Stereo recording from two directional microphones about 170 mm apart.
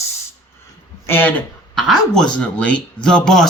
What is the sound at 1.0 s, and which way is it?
Speech, 15° left (ahead or behind).